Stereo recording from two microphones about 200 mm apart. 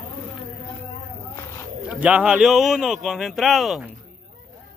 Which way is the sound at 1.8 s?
5° right (ahead or behind).